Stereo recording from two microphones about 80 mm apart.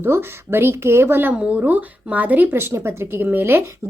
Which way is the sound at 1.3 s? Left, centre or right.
Centre.